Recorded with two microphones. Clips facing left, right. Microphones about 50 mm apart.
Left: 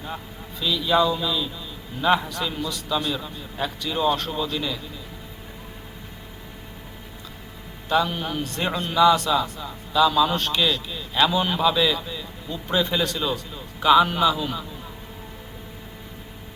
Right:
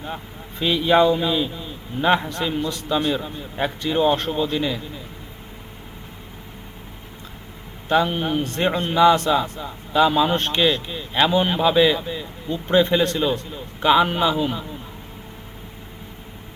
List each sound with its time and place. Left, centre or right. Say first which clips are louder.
0.6 s a man's voice: right 4 dB; right
7.9 s a man's voice: right 3 dB; right